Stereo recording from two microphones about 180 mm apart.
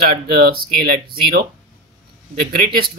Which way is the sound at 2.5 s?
55° right (ahead or behind).